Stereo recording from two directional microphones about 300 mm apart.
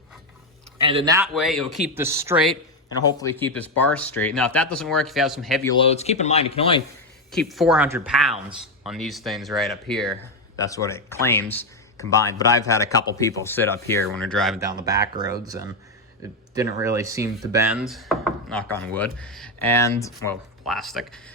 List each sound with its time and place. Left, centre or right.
0.8 s speech: centre
1.3 s speech: centre
3.0 s speech: centre
5.6 s speech: centre
7.3 s speech: centre
14.6 s speech: centre
16.8 s speech: centre